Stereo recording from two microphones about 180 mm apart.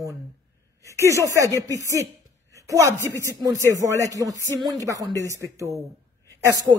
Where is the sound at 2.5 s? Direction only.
15° right (ahead or behind).